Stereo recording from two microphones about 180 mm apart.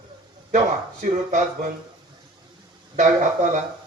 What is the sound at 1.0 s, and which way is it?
Speech, 45° right (ahead or behind).